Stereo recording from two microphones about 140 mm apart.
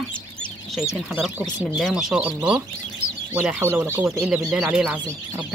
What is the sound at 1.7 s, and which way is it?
Speech, centre (ahead or behind).